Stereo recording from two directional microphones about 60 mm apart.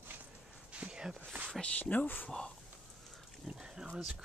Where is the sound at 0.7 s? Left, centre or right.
Centre.